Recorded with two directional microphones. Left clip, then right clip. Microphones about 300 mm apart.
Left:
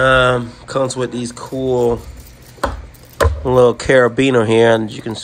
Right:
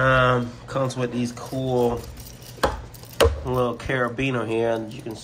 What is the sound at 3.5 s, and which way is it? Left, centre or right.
Speech, left.